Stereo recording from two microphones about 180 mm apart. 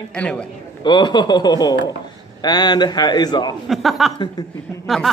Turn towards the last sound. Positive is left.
turn(degrees=0)  # may be behind; listen again after turning